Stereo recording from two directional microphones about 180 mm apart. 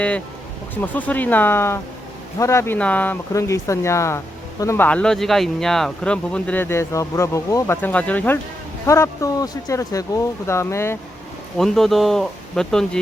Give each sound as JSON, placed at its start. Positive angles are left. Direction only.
{"t": 0.8, "sound": "speech", "side_deg": 10}
{"t": 11.5, "sound": "speech", "side_deg": 0}